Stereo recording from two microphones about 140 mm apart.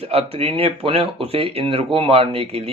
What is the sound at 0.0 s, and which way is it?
Speech, 45° right (ahead or behind).